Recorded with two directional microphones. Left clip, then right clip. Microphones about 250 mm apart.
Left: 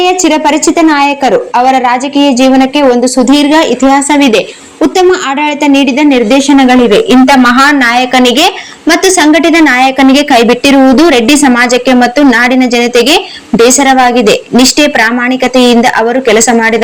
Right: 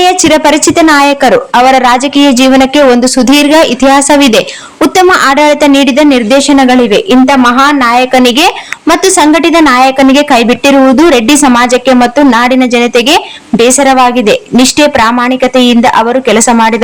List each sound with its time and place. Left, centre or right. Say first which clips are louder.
0.0 s a woman's voice: right 2 dB; right; by 16.7 s centre